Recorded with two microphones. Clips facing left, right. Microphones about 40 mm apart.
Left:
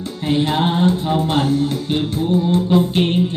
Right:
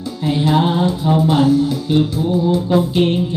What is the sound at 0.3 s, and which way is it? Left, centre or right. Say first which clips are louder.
Music: right 2 dB; left.